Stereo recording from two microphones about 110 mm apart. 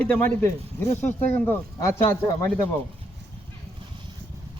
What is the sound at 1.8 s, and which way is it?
Speech, 25° left (ahead or behind).